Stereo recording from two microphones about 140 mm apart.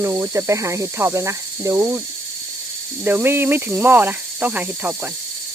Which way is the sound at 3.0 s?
15° right (ahead or behind).